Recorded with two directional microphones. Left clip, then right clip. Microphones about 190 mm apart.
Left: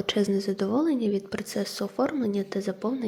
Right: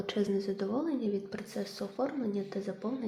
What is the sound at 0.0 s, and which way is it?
A woman's voice, 35° left (ahead or behind).